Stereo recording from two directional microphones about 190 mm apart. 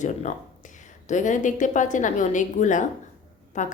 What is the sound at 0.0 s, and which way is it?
A woman's voice, 40° left (ahead or behind).